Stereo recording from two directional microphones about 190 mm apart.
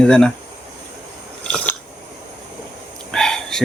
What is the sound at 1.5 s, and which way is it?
Biting, 5° left (ahead or behind).